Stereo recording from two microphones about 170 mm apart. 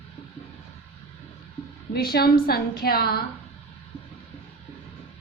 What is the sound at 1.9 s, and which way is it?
A woman's voice, 65° left (ahead or behind).